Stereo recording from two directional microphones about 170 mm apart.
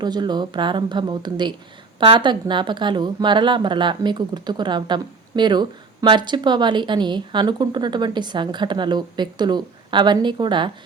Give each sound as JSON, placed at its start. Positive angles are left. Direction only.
{"t": 0.0, "sound": "a woman's voice", "side_deg": -25}